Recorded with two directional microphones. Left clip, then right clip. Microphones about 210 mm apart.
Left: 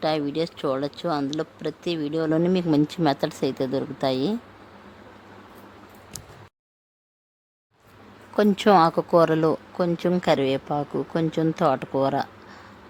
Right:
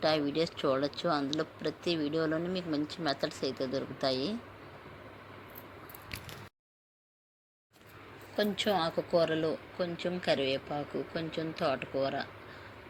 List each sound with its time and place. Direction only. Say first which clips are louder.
0.0 s speech: left 5 dB; 20° left (ahead or behind)
8.4 s speech: left 13 dB; 25° left (ahead or behind)